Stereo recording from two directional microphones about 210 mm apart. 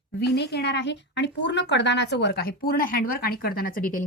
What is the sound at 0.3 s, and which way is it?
A woman's voice, 50° left (ahead or behind).